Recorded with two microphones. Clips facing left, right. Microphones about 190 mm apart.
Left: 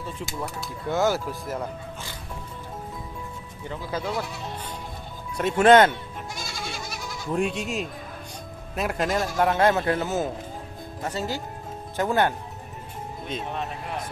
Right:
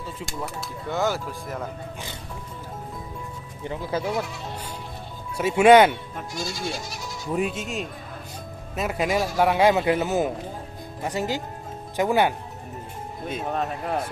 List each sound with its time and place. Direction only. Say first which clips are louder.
0.0 s speech: even; centre (ahead or behind)
3.6 s speech: right 3 dB; 20° right (ahead or behind)
5.4 s speech: right 2 dB; 10° right (ahead or behind)
7.3 s speech: left 1 dB; centre (ahead or behind)
13.4 s speech: right 8 dB; 40° right (ahead or behind)